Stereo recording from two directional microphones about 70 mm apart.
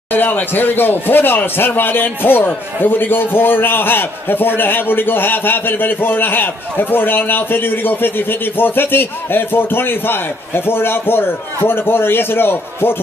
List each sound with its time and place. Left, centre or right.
0.1 s speech: left